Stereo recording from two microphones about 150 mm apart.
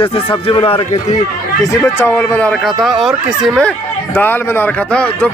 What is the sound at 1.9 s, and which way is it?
Speech, 15° left (ahead or behind).